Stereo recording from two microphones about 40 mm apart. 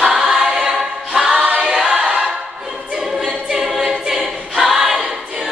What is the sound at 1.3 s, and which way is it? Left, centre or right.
Choir, right.